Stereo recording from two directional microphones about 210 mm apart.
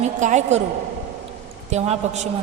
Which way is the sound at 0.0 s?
35° right (ahead or behind).